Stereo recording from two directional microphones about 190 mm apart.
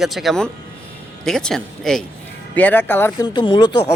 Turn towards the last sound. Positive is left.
turn(degrees=25)  # may be behind; listen again after turning